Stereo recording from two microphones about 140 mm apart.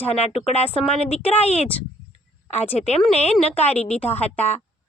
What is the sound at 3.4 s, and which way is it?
Speech, 45° left (ahead or behind).